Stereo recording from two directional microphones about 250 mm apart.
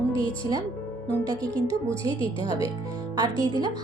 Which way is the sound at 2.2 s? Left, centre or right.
Left.